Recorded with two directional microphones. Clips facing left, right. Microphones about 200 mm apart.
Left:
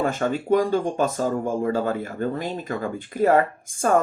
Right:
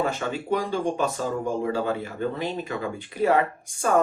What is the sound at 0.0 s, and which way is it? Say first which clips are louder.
Speech: left 3 dB; 45° left (ahead or behind).